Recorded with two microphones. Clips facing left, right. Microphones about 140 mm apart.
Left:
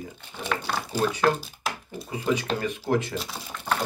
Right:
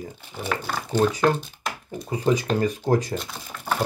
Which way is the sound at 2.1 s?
35° right (ahead or behind).